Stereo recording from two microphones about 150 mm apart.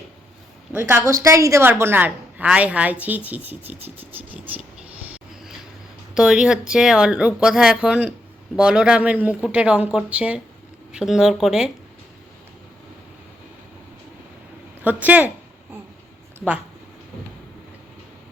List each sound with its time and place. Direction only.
0.7 s a woman's voice: 15° right (ahead or behind)
6.1 s speech: 5° right (ahead or behind)
14.8 s speech: 10° right (ahead or behind)